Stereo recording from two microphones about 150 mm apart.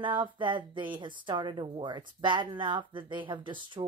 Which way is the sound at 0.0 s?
30° right (ahead or behind).